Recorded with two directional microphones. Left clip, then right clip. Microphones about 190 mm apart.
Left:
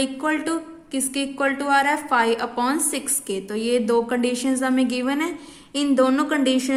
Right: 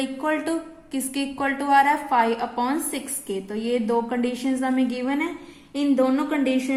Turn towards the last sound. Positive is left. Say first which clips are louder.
# left 3 dB
turn(degrees=30)  # may be behind; listen again after turning